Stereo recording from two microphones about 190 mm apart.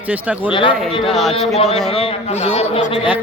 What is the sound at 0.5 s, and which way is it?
Speech, 25° left (ahead or behind).